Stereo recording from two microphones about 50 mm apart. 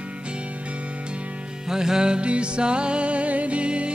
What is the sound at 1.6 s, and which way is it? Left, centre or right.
Music, centre.